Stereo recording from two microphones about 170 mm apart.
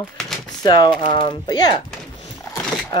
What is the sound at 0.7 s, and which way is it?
Speech, 25° left (ahead or behind).